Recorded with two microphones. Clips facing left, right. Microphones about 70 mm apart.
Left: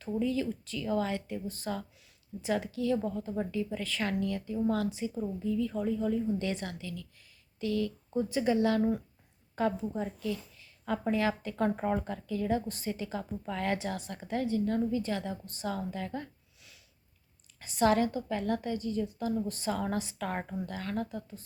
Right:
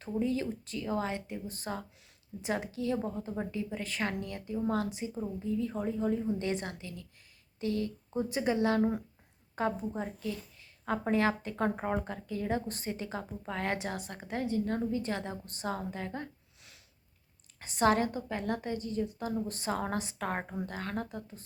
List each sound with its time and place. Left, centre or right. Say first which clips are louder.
0.0 s a woman's voice: left 1 dB; right
11.8 s speech: left 2 dB; centre
12.0 s a woman's voice: left 3 dB; right
17.7 s a woman's voice: left 1 dB; right